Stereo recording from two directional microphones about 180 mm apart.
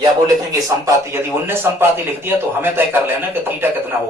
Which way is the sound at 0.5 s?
15° right (ahead or behind).